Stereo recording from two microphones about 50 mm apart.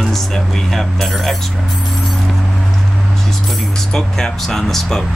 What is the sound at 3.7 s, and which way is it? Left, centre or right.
Speech, centre.